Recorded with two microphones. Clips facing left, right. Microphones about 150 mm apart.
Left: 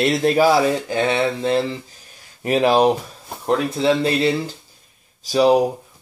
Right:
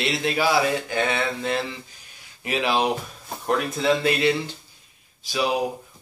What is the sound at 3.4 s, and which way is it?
Speech, 30° left (ahead or behind).